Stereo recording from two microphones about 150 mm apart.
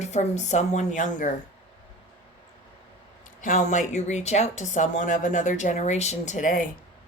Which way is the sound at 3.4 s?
55° left (ahead or behind).